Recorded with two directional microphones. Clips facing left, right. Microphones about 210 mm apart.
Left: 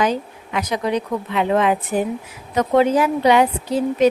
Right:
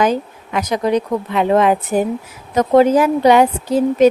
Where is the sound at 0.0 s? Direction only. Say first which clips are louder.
Right 4 dB; 45° right (ahead or behind).